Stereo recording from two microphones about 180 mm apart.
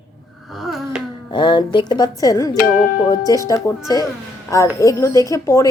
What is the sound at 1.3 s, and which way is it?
Speech, 25° left (ahead or behind).